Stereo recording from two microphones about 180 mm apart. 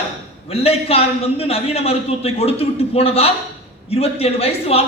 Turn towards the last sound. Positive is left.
turn(degrees=35)  # may be behind; listen again after turning